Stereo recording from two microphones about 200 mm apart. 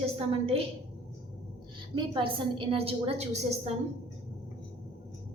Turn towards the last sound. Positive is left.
turn(degrees=-30)  # may be behind; listen again after turning